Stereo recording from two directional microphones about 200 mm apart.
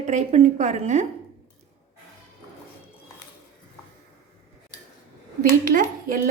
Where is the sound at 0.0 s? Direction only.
35° right (ahead or behind).